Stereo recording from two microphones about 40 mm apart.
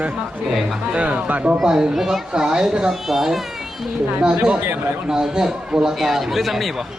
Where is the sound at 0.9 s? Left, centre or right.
Right.